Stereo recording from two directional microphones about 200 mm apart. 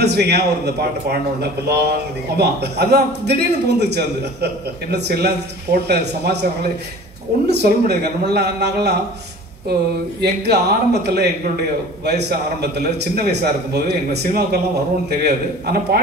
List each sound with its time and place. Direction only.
0.0 s speech: 55° right (ahead or behind)
7.4 s speech: 55° right (ahead or behind)
10.2 s a man's voice: 55° right (ahead or behind)